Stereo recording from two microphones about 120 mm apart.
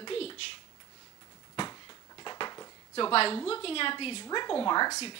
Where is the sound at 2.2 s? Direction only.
35° left (ahead or behind).